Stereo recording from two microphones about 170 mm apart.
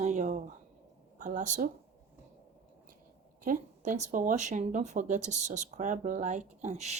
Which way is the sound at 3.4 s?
50° right (ahead or behind).